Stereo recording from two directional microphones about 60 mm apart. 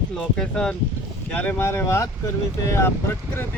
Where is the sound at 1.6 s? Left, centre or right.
Left.